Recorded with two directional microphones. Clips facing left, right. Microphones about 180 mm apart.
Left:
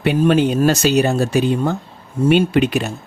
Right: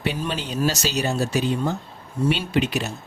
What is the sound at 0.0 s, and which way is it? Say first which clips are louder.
Speech: left 12 dB; 55° left (ahead or behind).